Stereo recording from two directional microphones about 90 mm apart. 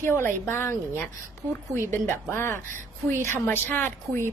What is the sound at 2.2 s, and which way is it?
A woman's voice, 30° left (ahead or behind).